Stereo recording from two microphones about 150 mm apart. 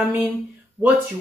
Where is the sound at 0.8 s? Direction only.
Centre (ahead or behind).